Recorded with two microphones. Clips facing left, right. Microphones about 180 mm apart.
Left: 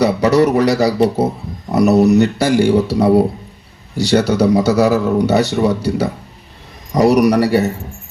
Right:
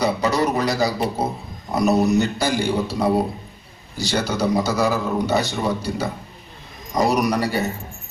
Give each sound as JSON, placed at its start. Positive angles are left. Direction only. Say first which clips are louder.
{"t": 0.0, "sound": "a man's voice", "louder": "left 8 dB", "side_deg": 75}